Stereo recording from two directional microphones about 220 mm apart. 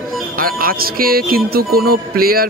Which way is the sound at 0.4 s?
40° right (ahead or behind).